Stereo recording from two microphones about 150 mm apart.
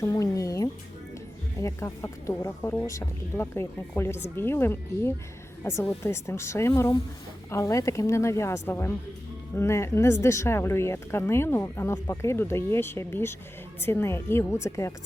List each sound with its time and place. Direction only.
0.0 s a woman's voice: 20° left (ahead or behind)